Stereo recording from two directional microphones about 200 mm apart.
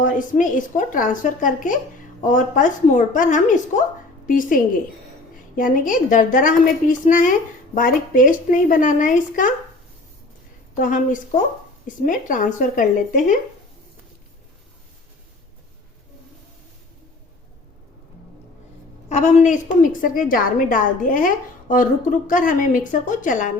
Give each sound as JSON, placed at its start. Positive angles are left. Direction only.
{"t": 0.0, "sound": "a woman's voice", "side_deg": 40}
{"t": 10.8, "sound": "a woman's voice", "side_deg": 40}
{"t": 19.0, "sound": "a woman's voice", "side_deg": 35}